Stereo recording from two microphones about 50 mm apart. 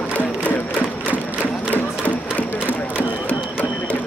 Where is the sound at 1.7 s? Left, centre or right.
Left.